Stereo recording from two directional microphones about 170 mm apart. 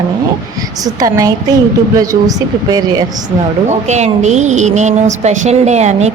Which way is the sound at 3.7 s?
40° right (ahead or behind).